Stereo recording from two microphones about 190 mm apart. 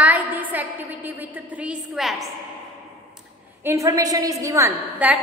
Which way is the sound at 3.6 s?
15° right (ahead or behind).